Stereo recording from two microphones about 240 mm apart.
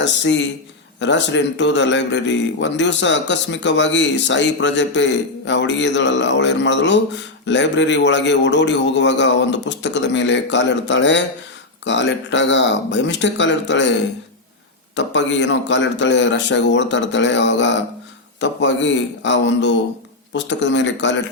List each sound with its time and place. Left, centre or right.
0.0 s a man's voice: left
14.9 s a man's voice: left